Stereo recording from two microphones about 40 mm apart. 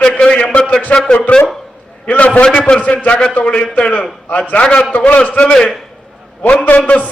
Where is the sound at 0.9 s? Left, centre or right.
Centre.